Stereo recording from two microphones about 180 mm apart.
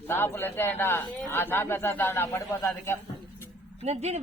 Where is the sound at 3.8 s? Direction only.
35° right (ahead or behind).